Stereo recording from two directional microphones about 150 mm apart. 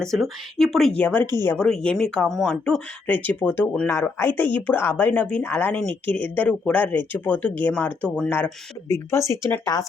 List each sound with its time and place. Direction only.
0.0 s speech: centre (ahead or behind); by 9.8 s 20° left (ahead or behind)